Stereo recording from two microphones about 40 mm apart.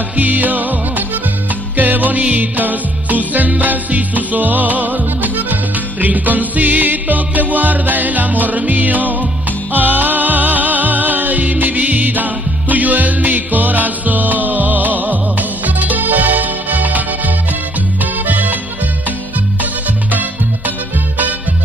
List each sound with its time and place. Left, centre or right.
0.1 s music: right
19.6 s music: right